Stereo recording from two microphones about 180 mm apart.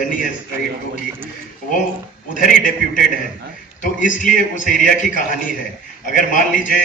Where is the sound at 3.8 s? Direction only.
45° left (ahead or behind).